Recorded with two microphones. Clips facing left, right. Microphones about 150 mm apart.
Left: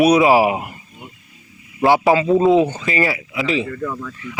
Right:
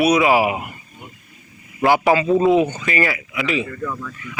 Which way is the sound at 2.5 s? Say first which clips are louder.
Left 2 dB; 30° left (ahead or behind).